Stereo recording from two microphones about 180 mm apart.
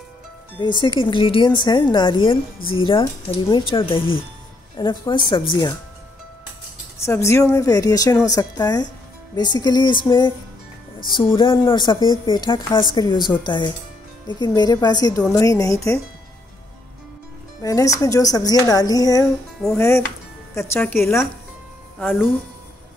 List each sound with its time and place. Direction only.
0.6 s a woman's voice: 25° left (ahead or behind)
7.1 s a woman's voice: 15° left (ahead or behind)
17.6 s a woman's voice: 20° left (ahead or behind)
20.5 s a woman's voice: 10° left (ahead or behind)
21.9 s speech: centre (ahead or behind)